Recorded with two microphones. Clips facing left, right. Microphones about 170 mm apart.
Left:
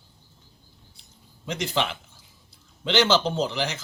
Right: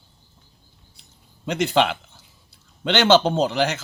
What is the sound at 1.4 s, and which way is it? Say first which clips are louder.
Speech: right 7 dB; 65° right (ahead or behind).